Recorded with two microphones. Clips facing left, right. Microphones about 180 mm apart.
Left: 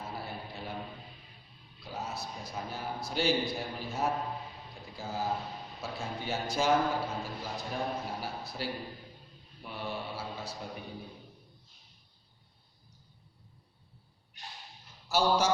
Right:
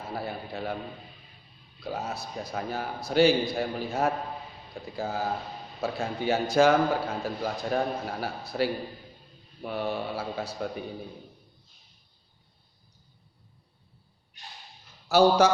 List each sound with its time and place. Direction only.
0.1 s a man's voice: 80° right
1.8 s a man's voice: 70° right (ahead or behind)
15.1 s a man's voice: 65° right (ahead or behind)